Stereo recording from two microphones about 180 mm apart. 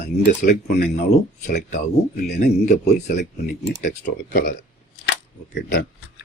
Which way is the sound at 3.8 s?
45° left (ahead or behind).